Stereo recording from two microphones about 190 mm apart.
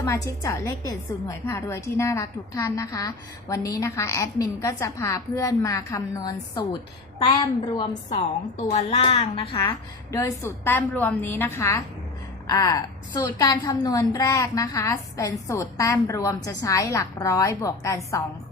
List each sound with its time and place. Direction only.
0.0 s a woman's voice: 15° left (ahead or behind)
8.7 s a woman's voice: 35° left (ahead or behind); by 18.2 s 15° left (ahead or behind)